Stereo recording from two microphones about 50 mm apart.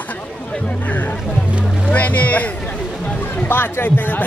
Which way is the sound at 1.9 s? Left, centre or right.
Left.